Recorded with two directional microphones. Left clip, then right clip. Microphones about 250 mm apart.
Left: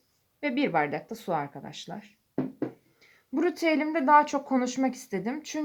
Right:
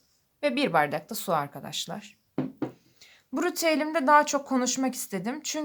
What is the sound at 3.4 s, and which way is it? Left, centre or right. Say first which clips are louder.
Speech: even; right.